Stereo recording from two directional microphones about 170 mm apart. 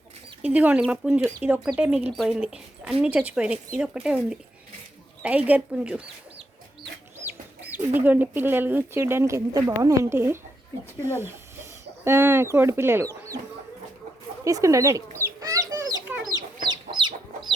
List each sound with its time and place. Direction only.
0.4 s speech: 10° right (ahead or behind)
7.9 s speech: 10° right (ahead or behind)
14.4 s chicken: 20° right (ahead or behind)
16.0 s chicken: 10° right (ahead or behind)
16.6 s chicken: 25° right (ahead or behind)